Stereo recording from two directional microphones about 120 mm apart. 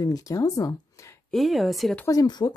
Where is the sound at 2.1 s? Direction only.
35° left (ahead or behind).